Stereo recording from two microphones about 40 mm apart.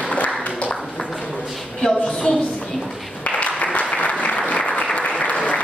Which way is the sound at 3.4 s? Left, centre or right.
Left.